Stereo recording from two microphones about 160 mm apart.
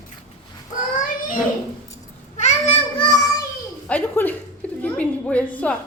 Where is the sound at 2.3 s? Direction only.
45° left (ahead or behind).